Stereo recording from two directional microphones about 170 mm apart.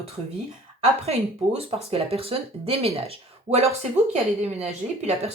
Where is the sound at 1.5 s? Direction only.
35° right (ahead or behind).